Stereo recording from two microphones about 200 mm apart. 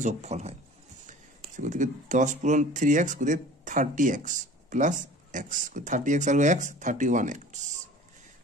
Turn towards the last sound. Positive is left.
turn(degrees=-35)  # may be behind; listen again after turning